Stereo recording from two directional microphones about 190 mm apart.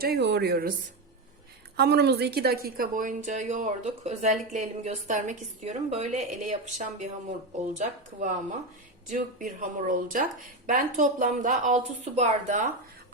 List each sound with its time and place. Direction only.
0.0 s speech: 60° right (ahead or behind)
1.7 s a woman's voice: 55° right (ahead or behind); by 12.7 s 40° right (ahead or behind)